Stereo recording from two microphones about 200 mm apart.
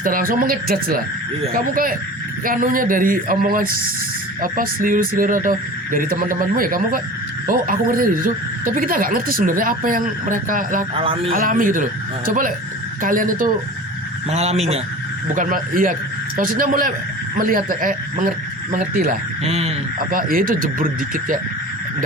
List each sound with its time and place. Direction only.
0.0 s a woman's voice: 45° right (ahead or behind)
10.9 s a man's voice: 25° right (ahead or behind)
11.3 s a woman's voice: 45° right (ahead or behind)
14.3 s speech: 30° right (ahead or behind)
15.4 s a woman's voice: 45° right (ahead or behind)
19.5 s speech: 30° right (ahead or behind)
20.1 s a woman's voice: 45° right (ahead or behind)